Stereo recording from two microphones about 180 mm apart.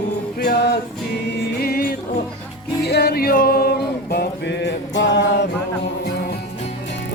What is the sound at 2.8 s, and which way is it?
Music, 65° left (ahead or behind).